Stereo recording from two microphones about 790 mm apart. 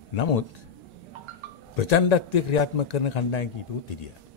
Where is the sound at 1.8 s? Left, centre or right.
Left.